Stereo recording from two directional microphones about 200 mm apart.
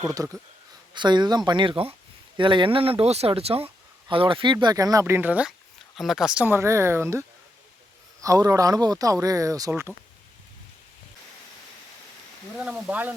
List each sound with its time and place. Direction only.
0.2 s speech: centre (ahead or behind)
0.9 s speech: 20° right (ahead or behind)
12.5 s speech: 5° right (ahead or behind)